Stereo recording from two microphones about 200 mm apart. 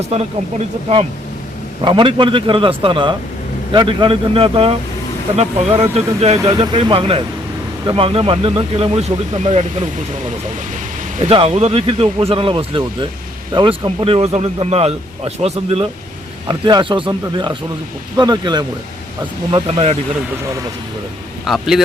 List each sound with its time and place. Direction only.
1.8 s speech: 25° right (ahead or behind)
11.2 s speech: 30° right (ahead or behind)
21.4 s speech: centre (ahead or behind)